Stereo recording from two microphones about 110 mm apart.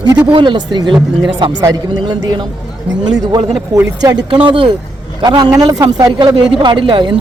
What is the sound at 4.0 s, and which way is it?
Speech, 35° right (ahead or behind).